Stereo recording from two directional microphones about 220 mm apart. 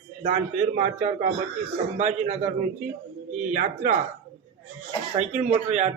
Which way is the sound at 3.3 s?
35° right (ahead or behind).